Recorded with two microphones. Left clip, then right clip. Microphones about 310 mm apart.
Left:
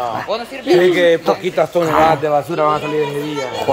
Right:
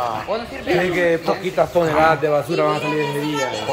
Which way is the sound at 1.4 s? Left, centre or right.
Left.